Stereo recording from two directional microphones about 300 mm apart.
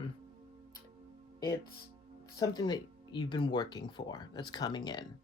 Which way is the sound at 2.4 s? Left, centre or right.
Centre.